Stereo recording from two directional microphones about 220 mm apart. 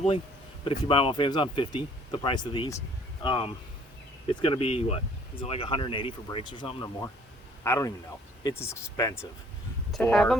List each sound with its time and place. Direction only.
0.6 s speech: 20° left (ahead or behind)
9.9 s speech: 5° left (ahead or behind)